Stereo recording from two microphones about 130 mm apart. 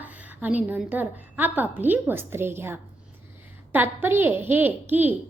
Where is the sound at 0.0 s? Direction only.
10° right (ahead or behind).